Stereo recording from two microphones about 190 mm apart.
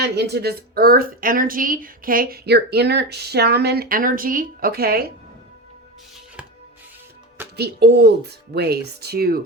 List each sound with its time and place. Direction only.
0.0 s speech: 60° right (ahead or behind)
7.5 s speech: 60° right (ahead or behind)